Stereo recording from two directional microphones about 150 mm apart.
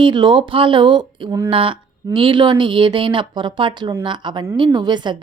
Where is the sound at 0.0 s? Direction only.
35° right (ahead or behind).